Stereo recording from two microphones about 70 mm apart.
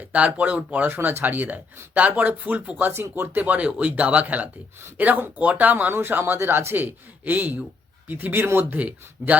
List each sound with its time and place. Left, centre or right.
0.1 s speech: right
0.9 s speech: right
8.8 s speech: right